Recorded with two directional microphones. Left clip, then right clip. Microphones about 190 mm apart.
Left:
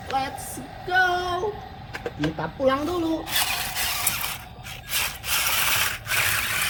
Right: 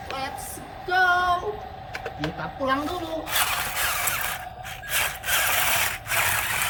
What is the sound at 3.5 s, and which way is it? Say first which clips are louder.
Vehicle: right 1 dB; 20° right (ahead or behind).